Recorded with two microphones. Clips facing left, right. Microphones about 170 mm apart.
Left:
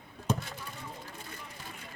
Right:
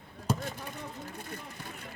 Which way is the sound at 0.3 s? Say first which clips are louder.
Right 4 dB; 50° right (ahead or behind).